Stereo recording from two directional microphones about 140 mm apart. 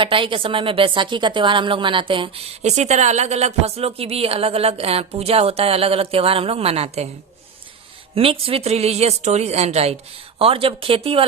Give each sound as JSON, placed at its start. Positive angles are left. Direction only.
{"t": 0.0, "sound": "a woman's voice", "side_deg": -40}
{"t": 2.6, "sound": "speech", "side_deg": -55}
{"t": 8.1, "sound": "a woman's voice", "side_deg": -40}